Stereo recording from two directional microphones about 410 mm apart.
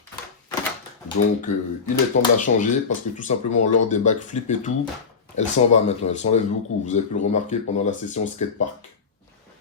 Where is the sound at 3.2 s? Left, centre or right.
Centre.